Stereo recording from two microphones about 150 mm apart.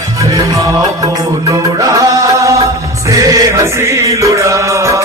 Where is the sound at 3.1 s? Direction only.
20° right (ahead or behind).